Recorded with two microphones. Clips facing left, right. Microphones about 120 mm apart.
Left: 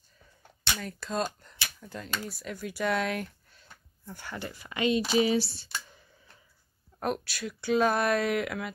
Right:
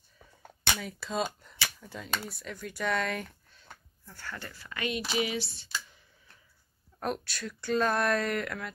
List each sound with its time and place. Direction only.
0.7 s speech: centre (ahead or behind)
4.0 s speech: 15° left (ahead or behind); by 5.7 s 35° left (ahead or behind)
7.0 s speech: 5° left (ahead or behind)